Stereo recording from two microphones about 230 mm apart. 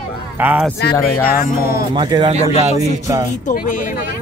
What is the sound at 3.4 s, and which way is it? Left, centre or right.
Speech, left.